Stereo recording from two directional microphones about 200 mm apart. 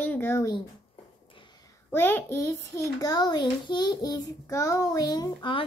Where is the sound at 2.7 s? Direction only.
15° left (ahead or behind).